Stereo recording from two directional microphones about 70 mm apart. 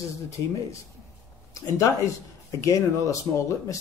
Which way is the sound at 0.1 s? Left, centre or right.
Left.